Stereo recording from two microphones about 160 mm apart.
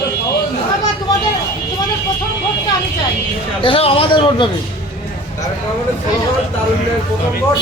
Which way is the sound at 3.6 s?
35° left (ahead or behind).